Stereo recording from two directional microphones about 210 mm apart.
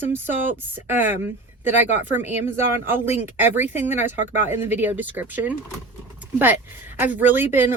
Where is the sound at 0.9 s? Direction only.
10° right (ahead or behind).